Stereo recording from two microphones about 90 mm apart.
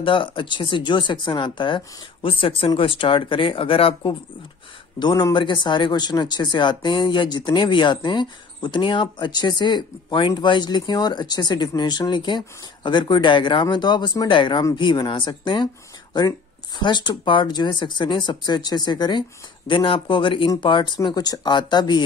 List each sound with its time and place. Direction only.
0.0 s speech: 70° left (ahead or behind)
2.2 s speech: 85° left
2.8 s speech: 75° left (ahead or behind)
4.9 s speech: 55° left (ahead or behind)
19.7 s speech: 70° left (ahead or behind); by 22.0 s 55° left (ahead or behind)